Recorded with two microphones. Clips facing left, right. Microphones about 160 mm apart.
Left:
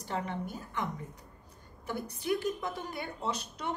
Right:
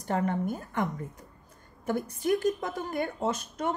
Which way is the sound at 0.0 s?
50° right (ahead or behind).